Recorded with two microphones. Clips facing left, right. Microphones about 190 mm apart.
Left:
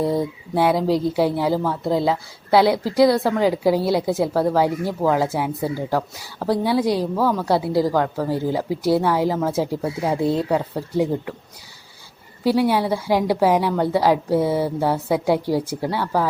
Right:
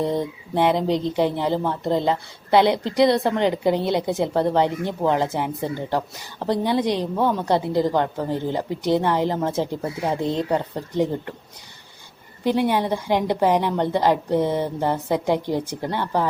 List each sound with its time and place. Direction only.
0.0 s a woman's voice: 5° left (ahead or behind)
12.5 s a woman's voice: 5° left (ahead or behind)